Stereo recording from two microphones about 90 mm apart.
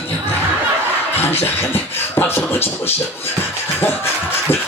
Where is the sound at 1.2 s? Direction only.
25° left (ahead or behind).